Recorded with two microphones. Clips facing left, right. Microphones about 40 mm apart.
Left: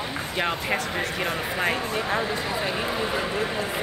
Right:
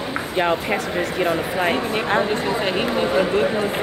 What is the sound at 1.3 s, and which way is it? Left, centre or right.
Speech, centre.